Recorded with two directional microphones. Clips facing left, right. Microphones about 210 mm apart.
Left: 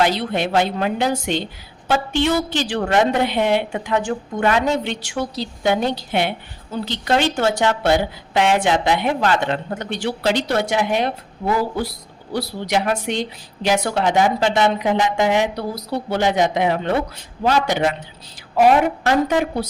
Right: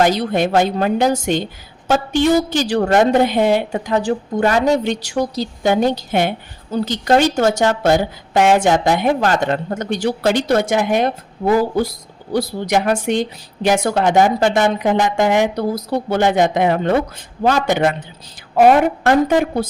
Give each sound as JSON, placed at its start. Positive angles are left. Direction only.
{"t": 0.0, "sound": "a woman's voice", "side_deg": -45}